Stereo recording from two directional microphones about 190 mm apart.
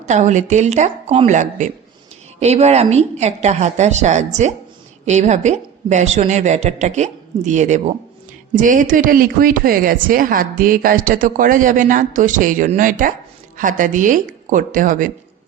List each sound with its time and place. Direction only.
0.0 s a woman's voice: 40° right (ahead or behind)